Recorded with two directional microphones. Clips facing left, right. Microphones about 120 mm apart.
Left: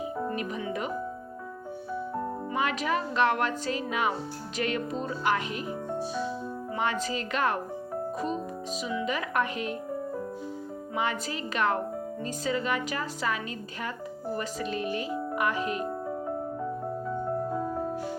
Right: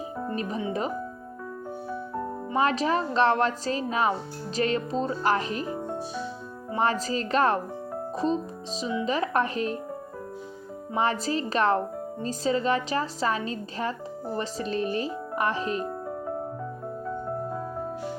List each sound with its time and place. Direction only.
0.3 s a woman's voice: 30° right (ahead or behind)
2.5 s a woman's voice: 35° right (ahead or behind)
6.7 s a woman's voice: 35° right (ahead or behind)
10.9 s a woman's voice: 35° right (ahead or behind)